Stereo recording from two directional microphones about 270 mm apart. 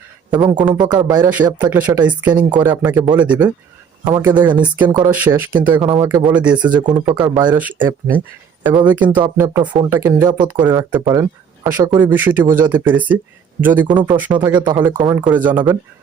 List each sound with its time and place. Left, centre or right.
0.4 s speech: centre